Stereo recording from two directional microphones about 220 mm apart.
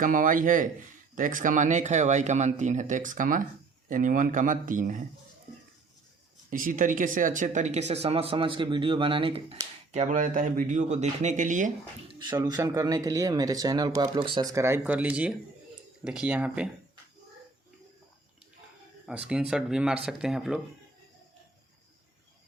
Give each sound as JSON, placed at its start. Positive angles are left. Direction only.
{"t": 0.0, "sound": "speech", "side_deg": -40}
{"t": 6.5, "sound": "speech", "side_deg": -40}
{"t": 12.2, "sound": "speech", "side_deg": -20}
{"t": 19.3, "sound": "speech", "side_deg": -5}